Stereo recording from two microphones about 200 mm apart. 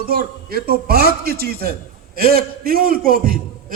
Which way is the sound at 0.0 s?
50° right (ahead or behind).